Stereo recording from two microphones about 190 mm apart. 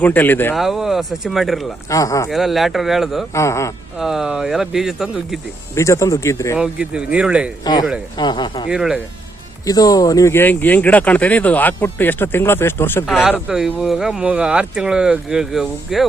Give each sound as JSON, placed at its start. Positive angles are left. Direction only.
{"t": 0.0, "sound": "speech", "side_deg": 10}
{"t": 0.5, "sound": "speech", "side_deg": 0}
{"t": 1.9, "sound": "speech", "side_deg": 15}
{"t": 2.3, "sound": "speech", "side_deg": 0}
{"t": 3.3, "sound": "speech", "side_deg": 15}
{"t": 3.9, "sound": "speech", "side_deg": 0}
{"t": 5.7, "sound": "speech", "side_deg": 15}
{"t": 6.6, "sound": "speech", "side_deg": -5}
{"t": 7.6, "sound": "speech", "side_deg": 20}
{"t": 8.7, "sound": "speech", "side_deg": -5}
{"t": 9.6, "sound": "speech", "side_deg": 20}
{"t": 13.1, "sound": "speech", "side_deg": 0}